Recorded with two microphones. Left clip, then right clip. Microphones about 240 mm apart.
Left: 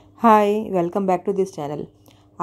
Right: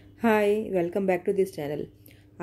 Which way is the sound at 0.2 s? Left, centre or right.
Centre.